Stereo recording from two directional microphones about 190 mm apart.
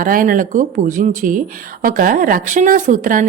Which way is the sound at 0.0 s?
45° right (ahead or behind).